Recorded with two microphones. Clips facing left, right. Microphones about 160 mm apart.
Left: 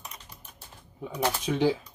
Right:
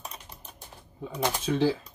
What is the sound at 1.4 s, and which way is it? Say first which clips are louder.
Speech: even; 15° left (ahead or behind).